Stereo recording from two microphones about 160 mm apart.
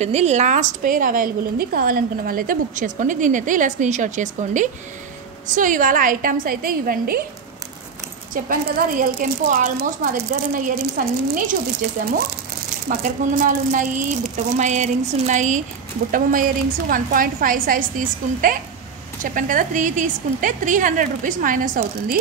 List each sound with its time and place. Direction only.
0.0 s a woman's voice: 45° right (ahead or behind); by 7.2 s 65° right (ahead or behind)
8.5 s a woman's voice: 60° right (ahead or behind)
11.8 s speech: 90° right
13.0 s a woman's voice: 60° right (ahead or behind)
16.1 s a woman's voice: 60° right (ahead or behind)